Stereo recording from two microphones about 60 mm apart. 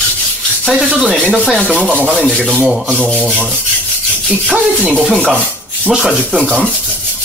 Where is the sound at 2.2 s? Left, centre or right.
Centre.